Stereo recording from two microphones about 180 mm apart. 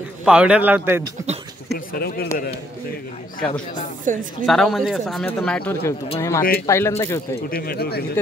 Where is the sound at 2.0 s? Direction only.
55° left (ahead or behind).